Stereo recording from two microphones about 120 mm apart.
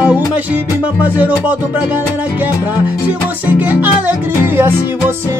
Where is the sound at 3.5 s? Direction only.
15° right (ahead or behind).